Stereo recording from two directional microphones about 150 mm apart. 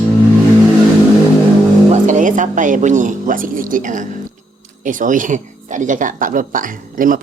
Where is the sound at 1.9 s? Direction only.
55° right (ahead or behind).